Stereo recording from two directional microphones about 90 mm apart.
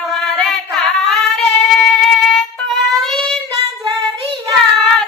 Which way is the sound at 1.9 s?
5° left (ahead or behind).